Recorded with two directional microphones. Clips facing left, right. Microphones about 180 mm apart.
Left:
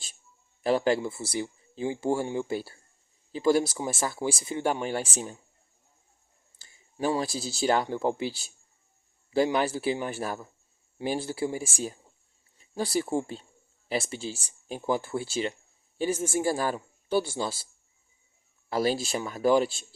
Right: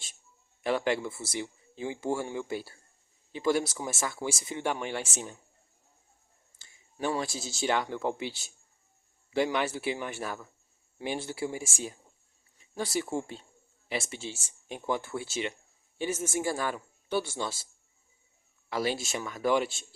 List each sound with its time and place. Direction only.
0.6 s speech: 35° left (ahead or behind)
6.6 s speech: 30° left (ahead or behind)
18.7 s speech: 40° left (ahead or behind)